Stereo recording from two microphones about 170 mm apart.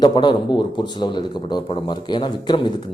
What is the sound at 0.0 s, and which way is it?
Speech, 25° left (ahead or behind).